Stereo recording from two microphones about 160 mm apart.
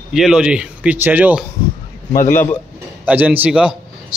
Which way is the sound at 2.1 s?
55° left (ahead or behind).